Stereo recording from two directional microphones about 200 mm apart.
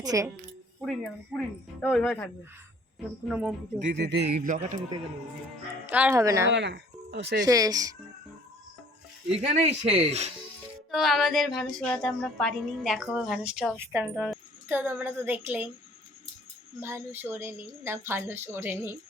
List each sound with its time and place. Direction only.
0.0 s speech: 20° right (ahead or behind)
0.8 s a woman's voice: centre (ahead or behind)
3.2 s a woman's voice: 5° right (ahead or behind)
3.9 s speech: 60° right (ahead or behind); by 4.8 s 35° right (ahead or behind)
5.8 s a woman's voice: 10° right (ahead or behind)
6.5 s speech: 60° right (ahead or behind)
7.4 s a woman's voice: 15° right (ahead or behind)
9.5 s speech: 30° right (ahead or behind)
10.9 s a woman's voice: centre (ahead or behind)
16.8 s a woman's voice: 10° right (ahead or behind)